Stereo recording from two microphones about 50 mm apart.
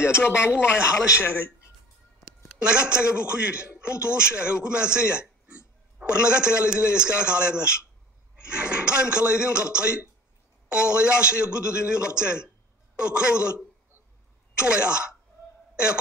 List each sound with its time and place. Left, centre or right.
0.0 s speech: left
2.4 s a man's voice: centre
14.6 s a man's voice: centre
15.7 s a sound: right